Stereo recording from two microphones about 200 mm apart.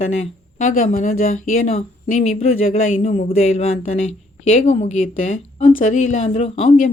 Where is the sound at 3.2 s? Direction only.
30° left (ahead or behind).